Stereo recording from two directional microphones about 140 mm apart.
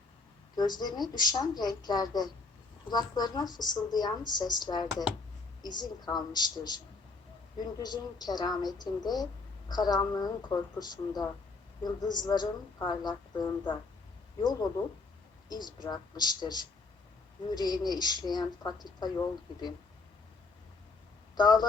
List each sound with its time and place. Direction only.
0.5 s a woman's voice: 30° left (ahead or behind)
15.4 s a woman's voice: 30° left (ahead or behind)
21.3 s a woman's voice: 30° left (ahead or behind)